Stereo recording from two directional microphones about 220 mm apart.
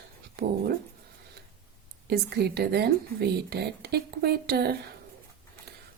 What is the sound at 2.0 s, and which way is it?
Speech, 45° right (ahead or behind).